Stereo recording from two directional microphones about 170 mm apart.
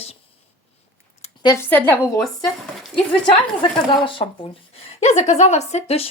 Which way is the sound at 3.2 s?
30° left (ahead or behind).